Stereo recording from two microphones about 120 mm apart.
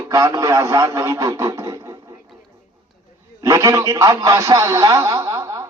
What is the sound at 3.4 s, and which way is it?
A man's voice, 25° right (ahead or behind).